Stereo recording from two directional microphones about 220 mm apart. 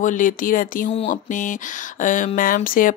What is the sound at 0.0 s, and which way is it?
Speech, 35° left (ahead or behind).